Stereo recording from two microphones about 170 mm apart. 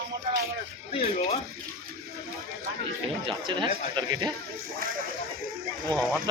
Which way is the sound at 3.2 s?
30° right (ahead or behind).